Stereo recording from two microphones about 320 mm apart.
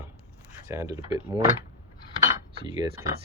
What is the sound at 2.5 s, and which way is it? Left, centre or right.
Cutlery, centre.